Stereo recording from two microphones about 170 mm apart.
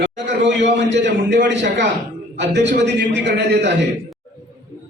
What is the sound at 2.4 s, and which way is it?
A man's voice, 90° right.